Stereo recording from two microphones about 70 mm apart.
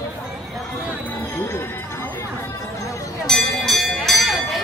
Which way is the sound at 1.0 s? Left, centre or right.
Left.